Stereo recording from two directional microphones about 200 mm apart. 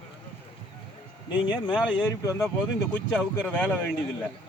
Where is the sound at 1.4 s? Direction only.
25° left (ahead or behind).